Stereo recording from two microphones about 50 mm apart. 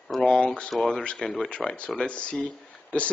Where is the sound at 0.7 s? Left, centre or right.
Centre.